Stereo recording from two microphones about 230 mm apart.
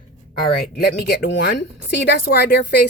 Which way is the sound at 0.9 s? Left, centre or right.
Left.